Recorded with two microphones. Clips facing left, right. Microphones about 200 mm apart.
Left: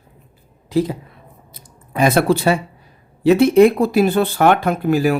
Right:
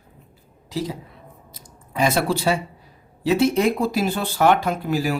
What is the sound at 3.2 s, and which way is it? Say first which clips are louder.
Speech: left 8 dB; 60° left (ahead or behind).